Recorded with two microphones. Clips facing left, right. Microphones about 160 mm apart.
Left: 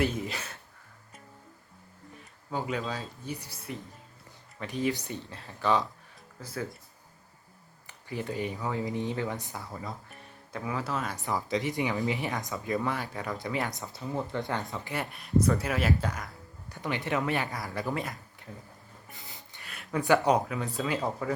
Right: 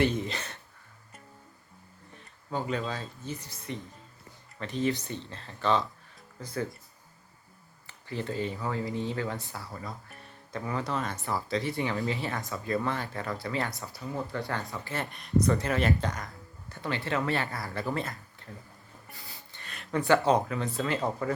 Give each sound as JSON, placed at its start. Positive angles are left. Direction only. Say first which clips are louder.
{"t": 0.0, "sound": "speech", "louder": "right 2 dB", "side_deg": 5}
{"t": 2.5, "sound": "speech", "louder": "right 1 dB", "side_deg": 10}
{"t": 7.9, "sound": "speech", "louder": "even", "side_deg": 10}
{"t": 10.1, "sound": "speech", "louder": "right 1 dB", "side_deg": 5}
{"t": 11.2, "sound": "speech", "louder": "left 1 dB", "side_deg": 15}
{"t": 15.0, "sound": "speech", "louder": "even", "side_deg": 5}
{"t": 19.1, "sound": "a sound", "louder": "even", "side_deg": 20}
{"t": 19.6, "sound": "a sound", "louder": "right 2 dB", "side_deg": 5}
{"t": 20.1, "sound": "speech", "louder": "even", "side_deg": 15}